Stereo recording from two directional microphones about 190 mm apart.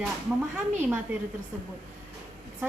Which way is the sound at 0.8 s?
10° right (ahead or behind).